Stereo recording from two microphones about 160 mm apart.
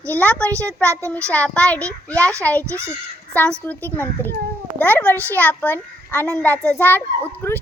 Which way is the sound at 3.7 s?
10° left (ahead or behind).